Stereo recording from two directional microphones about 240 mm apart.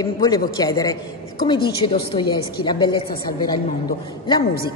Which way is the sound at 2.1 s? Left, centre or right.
Centre.